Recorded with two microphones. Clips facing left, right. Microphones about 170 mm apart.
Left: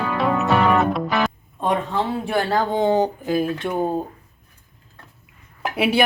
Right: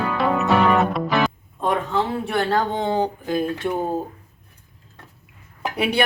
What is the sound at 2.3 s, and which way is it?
Speech, 10° left (ahead or behind).